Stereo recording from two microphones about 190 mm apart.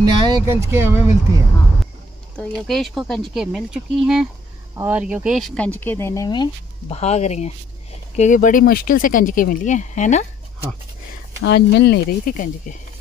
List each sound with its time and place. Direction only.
0.0 s speech: 20° right (ahead or behind)
2.3 s speech: 5° left (ahead or behind); by 10.2 s 40° left (ahead or behind)
11.4 s speech: 65° left (ahead or behind); by 12.7 s 45° left (ahead or behind)